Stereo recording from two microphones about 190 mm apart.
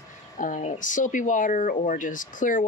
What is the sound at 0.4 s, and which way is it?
Speech, 40° left (ahead or behind).